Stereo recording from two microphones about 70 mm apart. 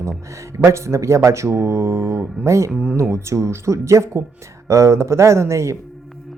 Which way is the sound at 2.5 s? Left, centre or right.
Right.